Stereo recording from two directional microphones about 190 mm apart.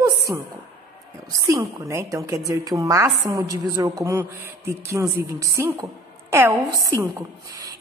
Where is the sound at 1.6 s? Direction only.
15° right (ahead or behind).